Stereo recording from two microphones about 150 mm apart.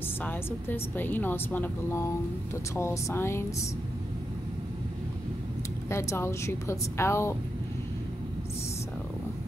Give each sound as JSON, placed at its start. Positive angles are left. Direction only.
{"t": 0.2, "sound": "a woman's voice", "side_deg": 10}
{"t": 5.9, "sound": "a woman's voice", "side_deg": 20}